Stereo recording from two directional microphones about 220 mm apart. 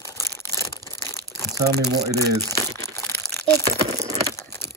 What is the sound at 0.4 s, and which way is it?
Crumpling, 10° left (ahead or behind).